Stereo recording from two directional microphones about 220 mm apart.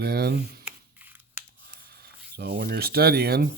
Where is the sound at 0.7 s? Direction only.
10° right (ahead or behind).